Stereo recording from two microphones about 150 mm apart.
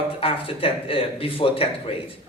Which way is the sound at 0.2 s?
40° left (ahead or behind).